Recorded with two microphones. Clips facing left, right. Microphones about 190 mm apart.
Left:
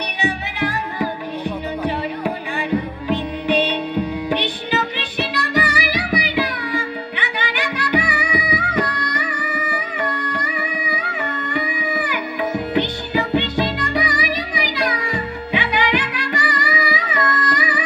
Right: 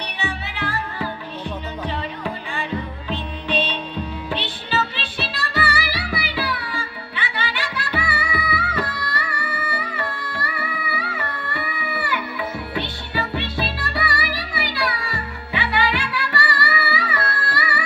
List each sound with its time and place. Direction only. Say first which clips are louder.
0.2 s music: left 7 dB; 15° left (ahead or behind)
10.9 s music: left 3 dB; 20° left (ahead or behind)